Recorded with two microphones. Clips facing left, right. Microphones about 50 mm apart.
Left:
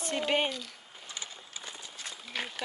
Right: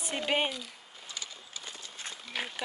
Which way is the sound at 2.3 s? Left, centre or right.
Centre.